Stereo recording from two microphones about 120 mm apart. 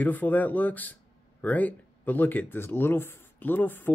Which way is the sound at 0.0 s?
15° left (ahead or behind).